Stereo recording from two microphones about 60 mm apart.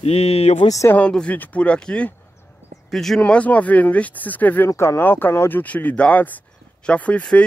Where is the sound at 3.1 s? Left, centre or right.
Left.